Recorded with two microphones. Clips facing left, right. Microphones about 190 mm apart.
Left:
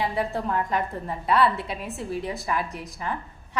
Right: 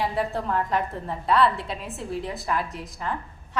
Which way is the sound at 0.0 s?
Centre (ahead or behind).